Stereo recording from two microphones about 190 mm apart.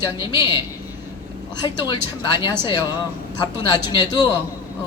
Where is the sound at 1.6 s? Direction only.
20° left (ahead or behind).